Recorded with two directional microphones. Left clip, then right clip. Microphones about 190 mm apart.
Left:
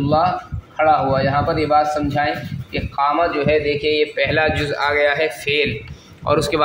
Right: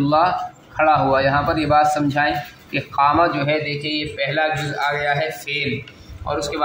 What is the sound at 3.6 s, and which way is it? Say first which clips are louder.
Speech: left 6 dB; 55° left (ahead or behind).